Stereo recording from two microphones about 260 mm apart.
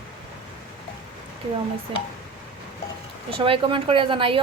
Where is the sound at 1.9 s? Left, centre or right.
Centre.